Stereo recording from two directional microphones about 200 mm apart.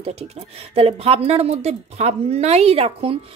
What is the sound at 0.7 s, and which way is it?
A woman's voice, 30° right (ahead or behind).